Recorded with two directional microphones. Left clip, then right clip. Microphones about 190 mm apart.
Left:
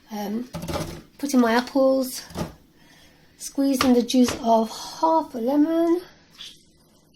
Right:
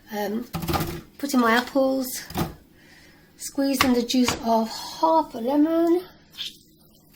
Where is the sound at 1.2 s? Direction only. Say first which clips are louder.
Even; 25° left (ahead or behind).